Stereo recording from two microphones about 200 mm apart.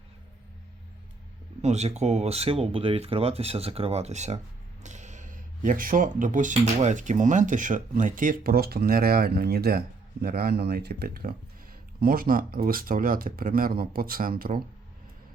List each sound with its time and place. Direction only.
1.6 s speech: 35° right (ahead or behind)